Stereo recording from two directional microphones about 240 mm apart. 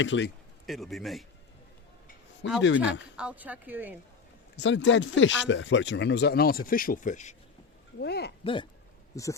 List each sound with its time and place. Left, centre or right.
0.0 s speech: left
0.7 s a man's voice: centre
2.6 s speech: left
3.2 s a woman's voice: centre
4.5 s speech: left
7.9 s speech: left
9.1 s speech: centre